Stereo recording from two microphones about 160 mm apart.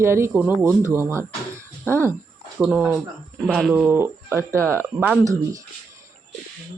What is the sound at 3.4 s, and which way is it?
Speech, centre (ahead or behind).